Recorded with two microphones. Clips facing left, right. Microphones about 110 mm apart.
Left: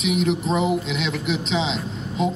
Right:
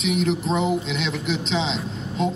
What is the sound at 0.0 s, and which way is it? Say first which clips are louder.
Speech: left 1 dB; centre (ahead or behind).